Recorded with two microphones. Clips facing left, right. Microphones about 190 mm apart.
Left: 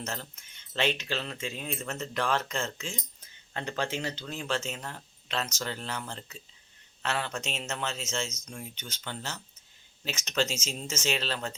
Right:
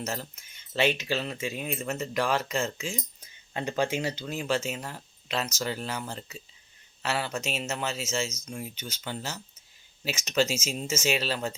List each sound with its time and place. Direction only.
0.0 s speech: 10° right (ahead or behind)